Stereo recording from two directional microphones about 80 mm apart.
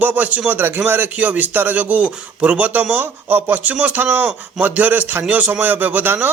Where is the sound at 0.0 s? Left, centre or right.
Centre.